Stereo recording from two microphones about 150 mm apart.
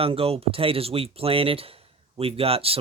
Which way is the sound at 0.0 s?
40° right (ahead or behind).